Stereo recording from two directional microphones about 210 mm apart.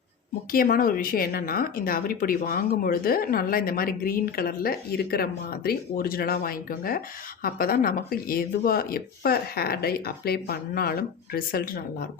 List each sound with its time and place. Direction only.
0.5 s a woman's voice: 40° left (ahead or behind)